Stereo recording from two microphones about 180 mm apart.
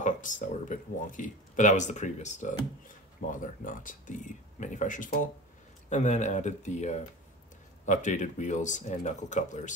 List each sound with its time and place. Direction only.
0.0 s speech: 45° left (ahead or behind)